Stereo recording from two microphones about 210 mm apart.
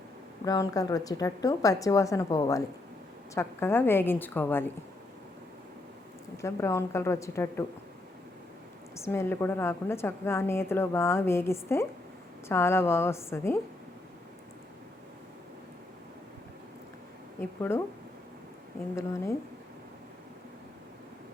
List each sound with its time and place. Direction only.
0.4 s a woman's voice: 15° left (ahead or behind)
6.3 s a woman's voice: 15° left (ahead or behind)
9.0 s a woman's voice: 10° left (ahead or behind)
17.6 s a woman's voice: 10° left (ahead or behind)
18.9 s a woman's voice: 15° left (ahead or behind)